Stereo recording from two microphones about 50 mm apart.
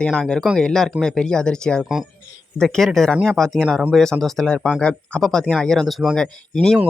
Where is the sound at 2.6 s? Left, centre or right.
Centre.